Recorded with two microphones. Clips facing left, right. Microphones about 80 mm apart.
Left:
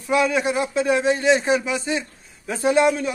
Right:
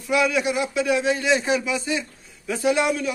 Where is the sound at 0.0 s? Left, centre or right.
Left.